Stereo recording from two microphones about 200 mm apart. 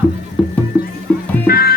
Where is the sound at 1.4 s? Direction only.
50° left (ahead or behind).